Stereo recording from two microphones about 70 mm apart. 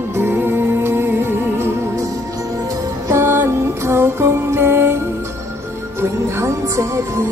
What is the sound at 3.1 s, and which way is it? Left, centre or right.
Music, right.